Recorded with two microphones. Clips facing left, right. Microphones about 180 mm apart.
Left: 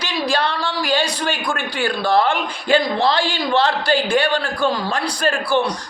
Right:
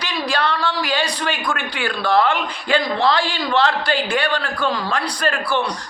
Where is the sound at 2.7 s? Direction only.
30° left (ahead or behind).